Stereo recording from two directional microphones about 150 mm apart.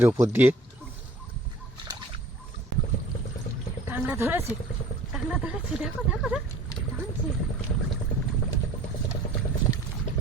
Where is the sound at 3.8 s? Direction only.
15° right (ahead or behind).